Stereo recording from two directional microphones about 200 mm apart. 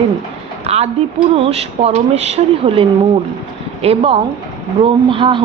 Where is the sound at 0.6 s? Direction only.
30° right (ahead or behind).